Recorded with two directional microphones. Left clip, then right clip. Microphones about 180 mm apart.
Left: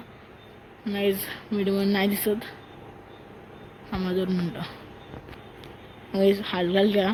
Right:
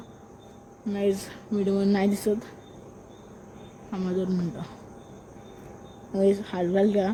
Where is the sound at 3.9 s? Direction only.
5° right (ahead or behind).